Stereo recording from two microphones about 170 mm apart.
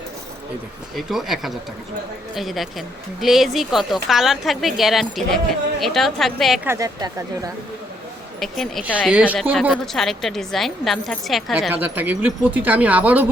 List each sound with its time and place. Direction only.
0.9 s speech: centre (ahead or behind)
6.7 s speech: 20° right (ahead or behind)
8.4 s speech: centre (ahead or behind)
9.3 s speech: 5° left (ahead or behind)
11.7 s speech: 10° right (ahead or behind)